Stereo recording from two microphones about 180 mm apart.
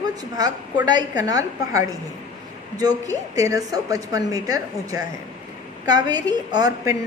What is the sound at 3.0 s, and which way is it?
A woman's voice, 20° right (ahead or behind).